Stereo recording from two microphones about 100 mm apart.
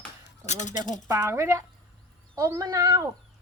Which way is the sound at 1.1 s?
25° right (ahead or behind).